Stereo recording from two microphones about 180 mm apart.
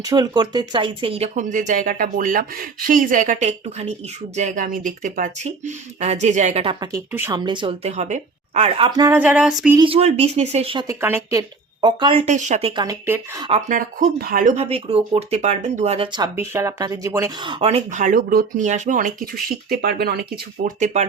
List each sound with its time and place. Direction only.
0.0 s speech: 20° right (ahead or behind)
6.7 s speech: 15° right (ahead or behind)
7.3 s speech: 25° right (ahead or behind)
9.0 s speech: 10° right (ahead or behind)
9.7 s speech: 30° right (ahead or behind)
10.8 s speech: 15° right (ahead or behind)
13.5 s speech: 45° right (ahead or behind)
16.1 s speech: 20° right (ahead or behind)
17.4 s speech: 30° right (ahead or behind); by 20.7 s 60° right (ahead or behind)
20.7 s speech: 40° right (ahead or behind)